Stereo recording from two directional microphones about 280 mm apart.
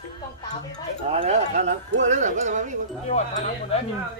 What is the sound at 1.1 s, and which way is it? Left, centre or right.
Music, right.